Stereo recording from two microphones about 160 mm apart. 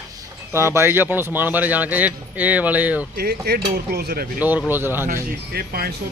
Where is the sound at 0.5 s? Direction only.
15° right (ahead or behind).